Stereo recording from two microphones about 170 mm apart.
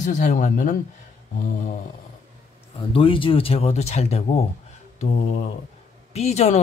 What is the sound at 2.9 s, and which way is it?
Speech, 30° left (ahead or behind).